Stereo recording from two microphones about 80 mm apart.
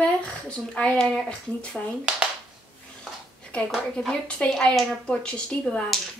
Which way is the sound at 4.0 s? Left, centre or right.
Centre.